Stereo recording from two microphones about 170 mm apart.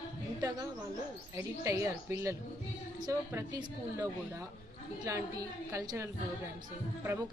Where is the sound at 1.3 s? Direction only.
15° right (ahead or behind).